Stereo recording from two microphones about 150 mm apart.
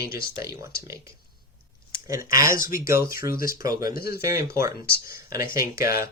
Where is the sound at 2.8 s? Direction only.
75° left (ahead or behind).